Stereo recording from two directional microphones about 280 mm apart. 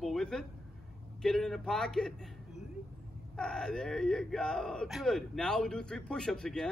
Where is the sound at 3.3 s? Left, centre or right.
Centre.